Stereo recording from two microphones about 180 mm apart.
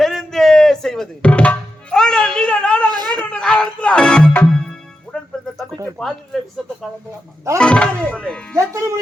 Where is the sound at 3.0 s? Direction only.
20° right (ahead or behind).